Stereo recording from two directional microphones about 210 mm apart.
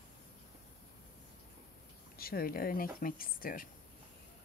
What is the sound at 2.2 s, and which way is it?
Speech, 45° left (ahead or behind).